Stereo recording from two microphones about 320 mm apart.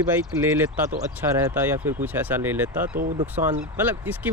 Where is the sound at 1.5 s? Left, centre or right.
Centre.